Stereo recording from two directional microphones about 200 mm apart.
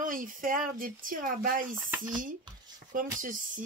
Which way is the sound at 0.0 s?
40° right (ahead or behind).